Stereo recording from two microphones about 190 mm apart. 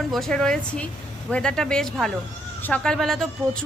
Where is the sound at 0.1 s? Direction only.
Centre (ahead or behind).